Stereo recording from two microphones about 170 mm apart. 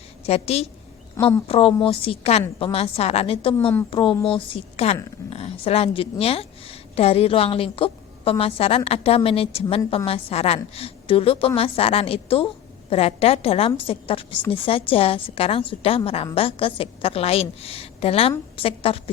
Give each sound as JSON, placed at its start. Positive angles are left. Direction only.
{"t": 0.3, "sound": "a woman's voice", "side_deg": 35}